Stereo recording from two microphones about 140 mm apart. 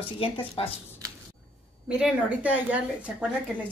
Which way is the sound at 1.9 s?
10° right (ahead or behind).